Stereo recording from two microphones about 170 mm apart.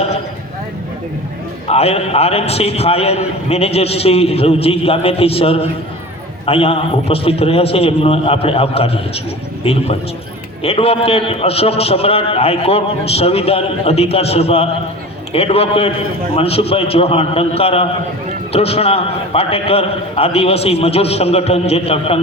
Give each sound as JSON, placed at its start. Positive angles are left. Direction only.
{"t": 1.6, "sound": "a man's voice", "side_deg": 35}